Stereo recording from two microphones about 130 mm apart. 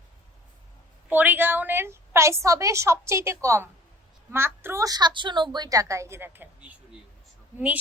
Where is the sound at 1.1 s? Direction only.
15° right (ahead or behind).